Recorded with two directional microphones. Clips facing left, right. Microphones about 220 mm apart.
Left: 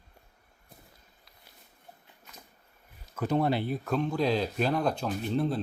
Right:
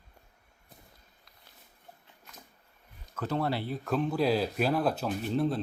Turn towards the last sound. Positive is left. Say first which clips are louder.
# even
turn(degrees=0)  # may be behind; listen again after turning